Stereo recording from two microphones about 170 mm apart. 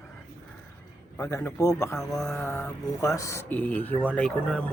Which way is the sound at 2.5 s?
15° left (ahead or behind).